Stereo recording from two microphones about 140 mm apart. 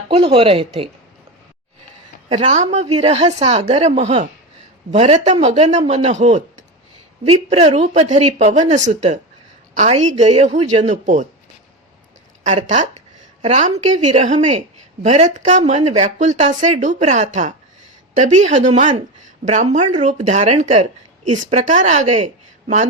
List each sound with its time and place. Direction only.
0.1 s a woman's voice: 45° right (ahead or behind)
2.3 s a woman's voice: 55° right (ahead or behind)
7.3 s speech: 45° right (ahead or behind); by 11.3 s 65° right (ahead or behind)
12.4 s speech: 55° right (ahead or behind)